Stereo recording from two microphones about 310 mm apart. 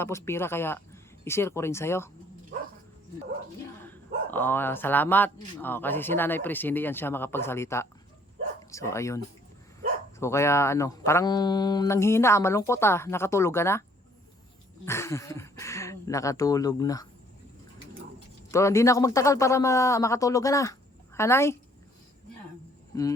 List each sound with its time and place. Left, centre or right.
0.0 s speech: centre
3.8 s speech: centre
14.8 s speech: centre
18.5 s speech: centre